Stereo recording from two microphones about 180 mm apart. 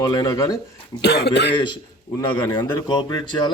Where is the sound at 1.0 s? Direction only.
70° left (ahead or behind).